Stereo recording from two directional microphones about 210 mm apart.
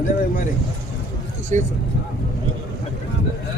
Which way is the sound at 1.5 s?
35° right (ahead or behind).